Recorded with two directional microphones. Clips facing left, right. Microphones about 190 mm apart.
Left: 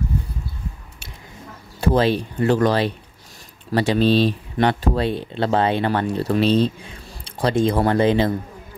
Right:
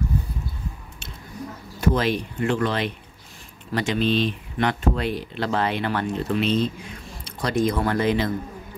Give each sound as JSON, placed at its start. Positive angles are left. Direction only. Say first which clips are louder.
{"t": 1.8, "sound": "speech", "louder": "left 4 dB", "side_deg": 30}